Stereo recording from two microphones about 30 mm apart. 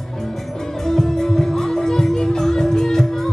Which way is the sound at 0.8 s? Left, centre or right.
Centre.